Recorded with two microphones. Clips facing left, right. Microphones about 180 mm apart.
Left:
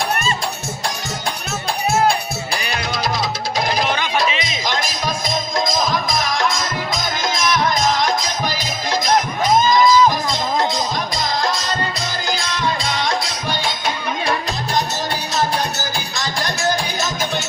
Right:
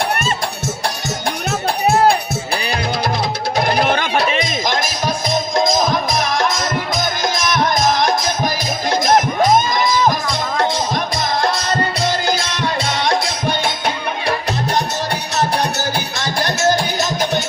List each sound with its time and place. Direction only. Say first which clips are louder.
3.7 s music: right 4 dB; 55° right (ahead or behind)
7.3 s music: even; 50° right (ahead or behind)
9.6 s music: left 4 dB; 55° right (ahead or behind)
11.2 s music: right 2 dB; 65° right (ahead or behind)